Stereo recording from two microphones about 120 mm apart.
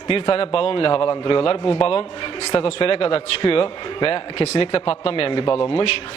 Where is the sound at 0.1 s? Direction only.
50° left (ahead or behind).